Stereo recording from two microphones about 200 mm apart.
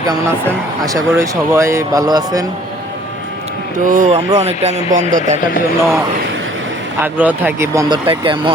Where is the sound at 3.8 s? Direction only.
40° right (ahead or behind).